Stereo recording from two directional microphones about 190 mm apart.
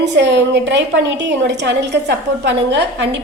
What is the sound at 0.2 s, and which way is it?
A woman's voice, 70° right (ahead or behind).